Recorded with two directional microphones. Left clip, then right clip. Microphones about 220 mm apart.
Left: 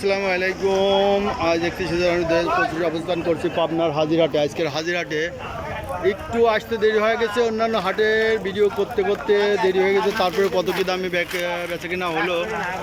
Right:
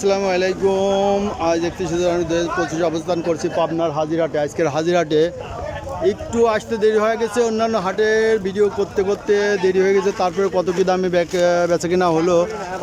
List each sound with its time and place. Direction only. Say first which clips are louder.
0.0 s speech: right 3 dB; 10° right (ahead or behind)
4.6 s speech: right 6 dB; 15° right (ahead or behind)